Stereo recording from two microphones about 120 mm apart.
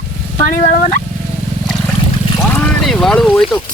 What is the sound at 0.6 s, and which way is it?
Speech, 80° left.